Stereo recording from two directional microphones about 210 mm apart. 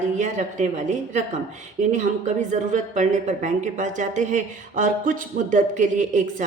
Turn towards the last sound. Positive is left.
turn(degrees=-35)  # may be behind; listen again after turning